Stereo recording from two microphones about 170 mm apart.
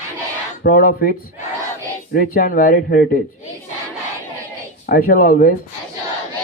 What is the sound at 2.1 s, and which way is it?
Speech, 60° left (ahead or behind).